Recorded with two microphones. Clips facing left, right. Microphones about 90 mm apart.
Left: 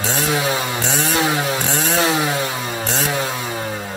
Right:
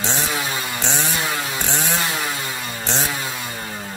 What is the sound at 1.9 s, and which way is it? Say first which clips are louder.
Chainsaw: left 6 dB; 90° left.